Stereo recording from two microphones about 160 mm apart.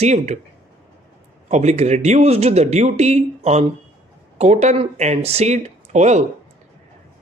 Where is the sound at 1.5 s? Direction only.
45° right (ahead or behind).